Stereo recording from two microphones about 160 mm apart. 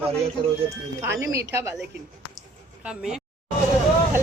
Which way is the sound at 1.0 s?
20° right (ahead or behind).